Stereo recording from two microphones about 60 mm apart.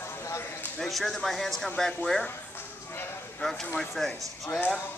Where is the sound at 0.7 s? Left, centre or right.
Centre.